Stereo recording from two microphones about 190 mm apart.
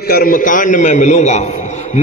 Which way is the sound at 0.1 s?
50° left (ahead or behind).